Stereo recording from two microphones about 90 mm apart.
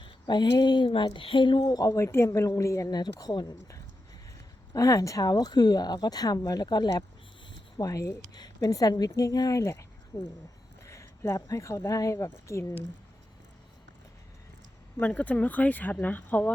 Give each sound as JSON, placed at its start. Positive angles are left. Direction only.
{"t": 0.0, "sound": "a woman's voice", "side_deg": 55}
{"t": 1.6, "sound": "a woman's voice", "side_deg": 40}
{"t": 2.9, "sound": "speech", "side_deg": 45}
{"t": 7.8, "sound": "a woman's voice", "side_deg": 40}
{"t": 10.8, "sound": "a sound", "side_deg": 35}
{"t": 11.3, "sound": "a woman's voice", "side_deg": 40}
{"t": 14.9, "sound": "speech", "side_deg": 15}